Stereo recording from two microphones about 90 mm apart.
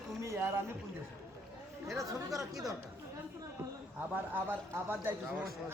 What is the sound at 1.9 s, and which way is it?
Speech, 35° right (ahead or behind).